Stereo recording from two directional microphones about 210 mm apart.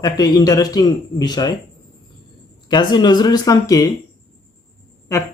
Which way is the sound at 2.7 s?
20° left (ahead or behind).